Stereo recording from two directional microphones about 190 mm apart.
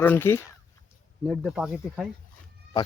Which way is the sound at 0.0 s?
10° left (ahead or behind).